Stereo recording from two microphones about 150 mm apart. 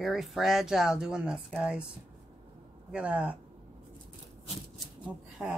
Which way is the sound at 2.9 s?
10° right (ahead or behind).